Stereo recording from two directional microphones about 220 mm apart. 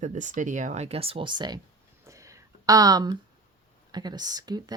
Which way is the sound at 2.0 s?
15° right (ahead or behind).